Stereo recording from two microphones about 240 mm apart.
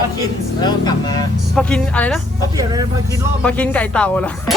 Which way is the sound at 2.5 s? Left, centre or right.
Centre.